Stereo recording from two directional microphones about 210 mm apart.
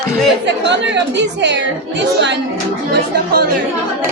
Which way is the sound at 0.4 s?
55° right (ahead or behind).